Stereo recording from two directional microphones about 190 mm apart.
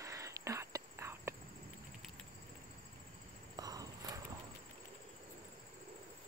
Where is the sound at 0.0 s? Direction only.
15° right (ahead or behind).